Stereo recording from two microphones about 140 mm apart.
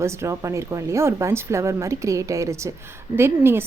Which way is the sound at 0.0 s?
20° right (ahead or behind).